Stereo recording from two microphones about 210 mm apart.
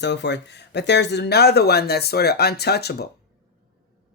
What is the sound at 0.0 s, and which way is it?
Speech, 55° left (ahead or behind).